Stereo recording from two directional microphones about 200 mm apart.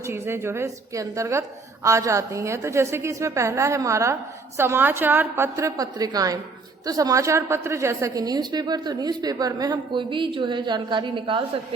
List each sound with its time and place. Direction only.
0.0 s a woman's voice: 10° right (ahead or behind)